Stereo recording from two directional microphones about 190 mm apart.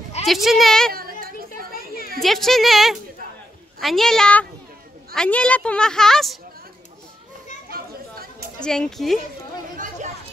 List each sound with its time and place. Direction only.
0.3 s a woman's voice: centre (ahead or behind)
0.9 s a sound: 50° right (ahead or behind)
2.1 s a woman's voice: centre (ahead or behind)
7.7 s chatter: 50° right (ahead or behind)
8.5 s a woman's voice: 5° left (ahead or behind)